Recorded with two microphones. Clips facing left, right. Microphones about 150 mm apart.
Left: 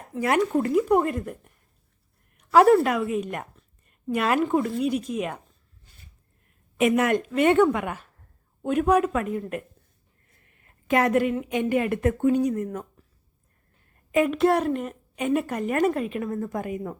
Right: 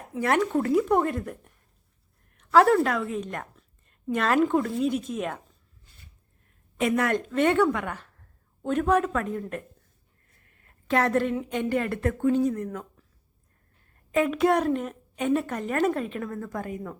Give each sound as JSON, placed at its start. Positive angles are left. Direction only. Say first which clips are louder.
{"t": 0.1, "sound": "speech", "louder": "left 1 dB", "side_deg": 5}
{"t": 2.5, "sound": "a woman's voice", "louder": "left 2 dB", "side_deg": 15}
{"t": 6.7, "sound": "a woman's voice", "louder": "left 3 dB", "side_deg": 15}
{"t": 14.2, "sound": "a woman's voice", "louder": "left 2 dB", "side_deg": 0}